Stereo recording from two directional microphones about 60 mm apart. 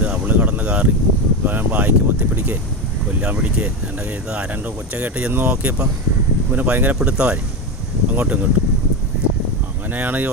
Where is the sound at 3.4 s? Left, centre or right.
Centre.